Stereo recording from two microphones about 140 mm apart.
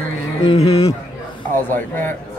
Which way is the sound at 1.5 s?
15° left (ahead or behind).